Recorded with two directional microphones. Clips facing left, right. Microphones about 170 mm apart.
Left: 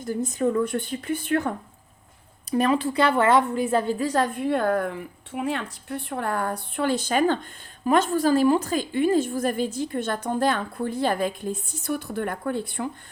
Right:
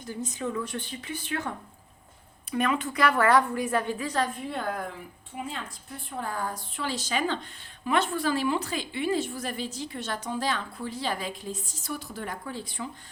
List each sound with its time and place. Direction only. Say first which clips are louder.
0.0 s a woman's voice: left 9 dB; 45° left (ahead or behind)
2.5 s a woman's voice: left 6 dB; 35° left (ahead or behind)
4.4 s a woman's voice: left 9 dB; 65° left (ahead or behind)